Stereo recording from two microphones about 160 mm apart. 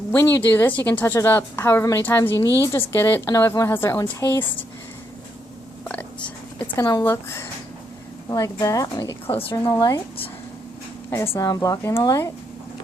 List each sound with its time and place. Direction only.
0.1 s a woman's voice: 15° left (ahead or behind)
5.9 s a sound: 10° left (ahead or behind)
6.7 s a woman's voice: 25° left (ahead or behind)
9.3 s a woman's voice: 35° left (ahead or behind)
9.7 s a woman's voice: 20° left (ahead or behind)
11.3 s a woman's voice: 20° left (ahead or behind)